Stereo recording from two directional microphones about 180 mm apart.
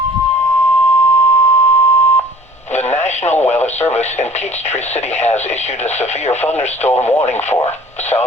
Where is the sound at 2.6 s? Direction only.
40° left (ahead or behind).